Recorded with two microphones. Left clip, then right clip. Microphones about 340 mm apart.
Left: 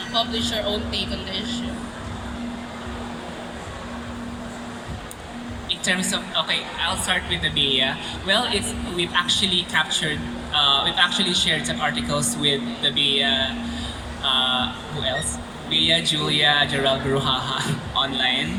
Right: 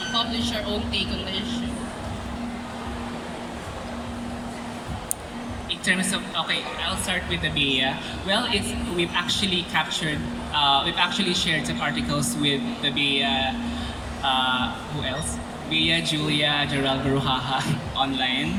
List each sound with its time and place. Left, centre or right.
0.1 s a man's voice: centre
5.8 s a man's voice: centre